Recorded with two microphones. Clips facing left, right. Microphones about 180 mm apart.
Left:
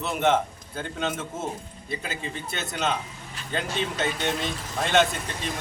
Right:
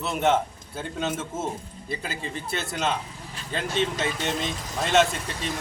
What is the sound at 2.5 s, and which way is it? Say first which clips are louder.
A man's voice: right 1 dB; centre (ahead or behind).